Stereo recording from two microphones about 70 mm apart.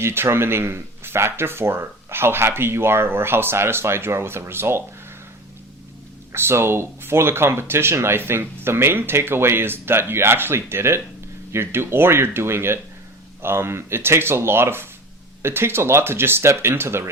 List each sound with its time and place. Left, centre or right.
0.0 s speech: right
6.3 s speech: right